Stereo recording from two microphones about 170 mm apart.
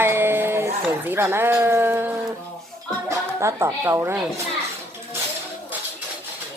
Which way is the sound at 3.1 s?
15° right (ahead or behind).